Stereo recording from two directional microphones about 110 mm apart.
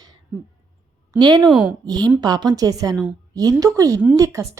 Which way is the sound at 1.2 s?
40° right (ahead or behind).